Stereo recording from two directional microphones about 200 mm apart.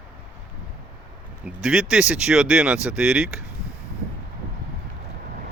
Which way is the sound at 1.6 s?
5° right (ahead or behind).